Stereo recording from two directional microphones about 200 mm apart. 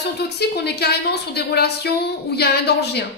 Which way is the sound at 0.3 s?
55° left (ahead or behind).